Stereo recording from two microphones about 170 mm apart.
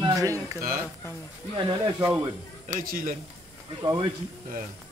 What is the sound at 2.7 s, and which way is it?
Speech, 55° right (ahead or behind).